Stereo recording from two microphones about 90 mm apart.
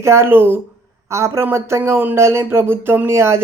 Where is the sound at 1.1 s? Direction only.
35° right (ahead or behind).